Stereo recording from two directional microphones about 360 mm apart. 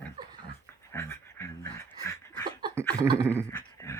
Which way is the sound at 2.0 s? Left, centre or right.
Centre.